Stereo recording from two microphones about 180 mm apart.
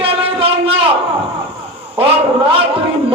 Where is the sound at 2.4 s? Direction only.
30° right (ahead or behind).